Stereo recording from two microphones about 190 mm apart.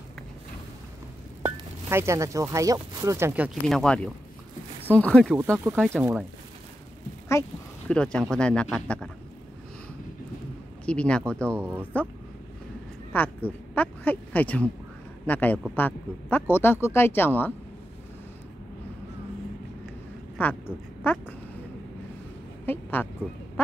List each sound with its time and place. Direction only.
1.4 s speech: 15° right (ahead or behind)
3.7 s speech: 5° left (ahead or behind)
5.3 s speech: 10° right (ahead or behind)
7.9 s speech: 5° left (ahead or behind)
10.9 s speech: 5° left (ahead or behind)
11.5 s speech: 10° right (ahead or behind)
13.1 s speech: 10° left (ahead or behind)
20.4 s speech: 10° left (ahead or behind)
22.7 s a woman's voice: 10° left (ahead or behind)